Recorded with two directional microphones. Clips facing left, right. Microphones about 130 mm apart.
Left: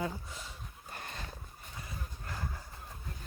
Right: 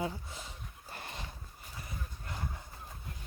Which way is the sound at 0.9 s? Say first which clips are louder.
Even; 25° right (ahead or behind).